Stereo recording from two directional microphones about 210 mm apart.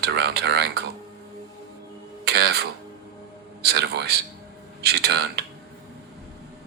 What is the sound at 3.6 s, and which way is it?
Speech, 50° right (ahead or behind).